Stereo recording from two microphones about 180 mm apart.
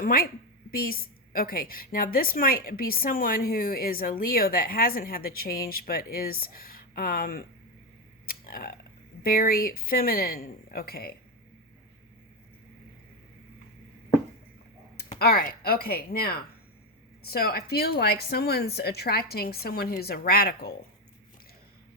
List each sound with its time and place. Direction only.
0.0 s a woman's voice: 55° left (ahead or behind)
8.3 s a sound: 55° left (ahead or behind)
9.2 s a woman's voice: 55° left (ahead or behind)
15.2 s a woman's voice: 55° left (ahead or behind)